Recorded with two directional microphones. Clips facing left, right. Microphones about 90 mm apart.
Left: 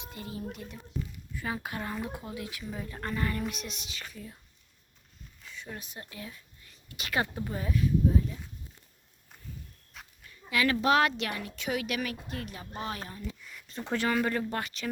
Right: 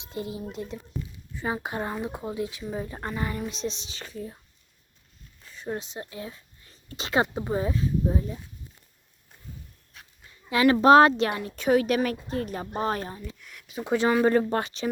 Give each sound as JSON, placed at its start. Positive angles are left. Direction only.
{"t": 0.0, "sound": "speech", "side_deg": -20}
{"t": 5.4, "sound": "a sound", "side_deg": -40}
{"t": 5.8, "sound": "speech", "side_deg": -25}
{"t": 10.2, "sound": "a woman's voice", "side_deg": -30}
{"t": 13.4, "sound": "speech", "side_deg": 0}
{"t": 14.0, "sound": "a woman's voice", "side_deg": -25}